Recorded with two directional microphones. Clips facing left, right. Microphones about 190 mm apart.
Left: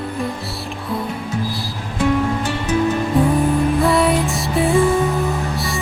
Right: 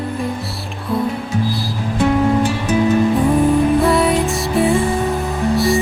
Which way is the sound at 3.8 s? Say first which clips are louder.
Right 1 dB; centre (ahead or behind).